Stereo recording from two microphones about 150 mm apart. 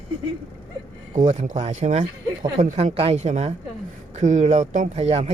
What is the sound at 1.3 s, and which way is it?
Speech, 50° right (ahead or behind).